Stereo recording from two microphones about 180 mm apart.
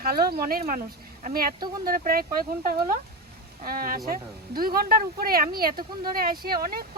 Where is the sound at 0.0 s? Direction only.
55° right (ahead or behind).